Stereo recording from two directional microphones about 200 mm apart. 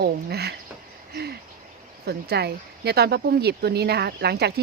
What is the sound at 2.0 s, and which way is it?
Speech, 55° right (ahead or behind).